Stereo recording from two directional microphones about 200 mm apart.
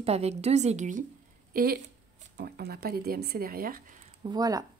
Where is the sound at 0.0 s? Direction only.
30° right (ahead or behind).